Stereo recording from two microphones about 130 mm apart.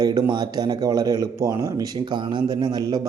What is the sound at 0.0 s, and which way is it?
Speech, 35° right (ahead or behind).